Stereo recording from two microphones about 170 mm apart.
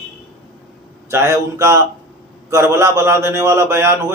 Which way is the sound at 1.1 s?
15° right (ahead or behind).